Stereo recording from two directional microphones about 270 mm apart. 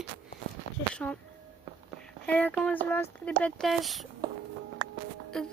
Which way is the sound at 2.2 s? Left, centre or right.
Centre.